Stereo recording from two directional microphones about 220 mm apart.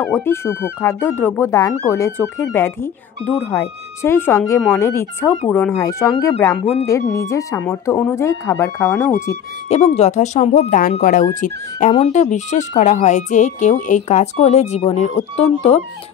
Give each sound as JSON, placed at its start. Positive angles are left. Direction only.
{"t": 0.0, "sound": "speech", "side_deg": 10}
{"t": 9.7, "sound": "speech", "side_deg": 30}